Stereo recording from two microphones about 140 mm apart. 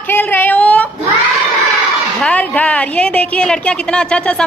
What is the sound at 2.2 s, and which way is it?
A woman's voice, 10° left (ahead or behind).